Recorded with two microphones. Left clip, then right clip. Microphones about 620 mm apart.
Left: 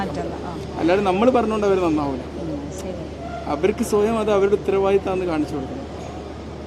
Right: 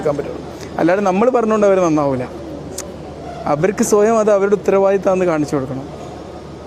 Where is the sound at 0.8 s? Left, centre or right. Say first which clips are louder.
Right 4 dB; right.